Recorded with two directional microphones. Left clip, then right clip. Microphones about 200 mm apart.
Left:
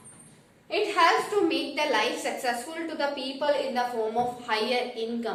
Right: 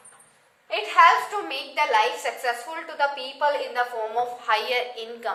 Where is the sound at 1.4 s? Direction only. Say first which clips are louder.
Right 1 dB; 25° right (ahead or behind).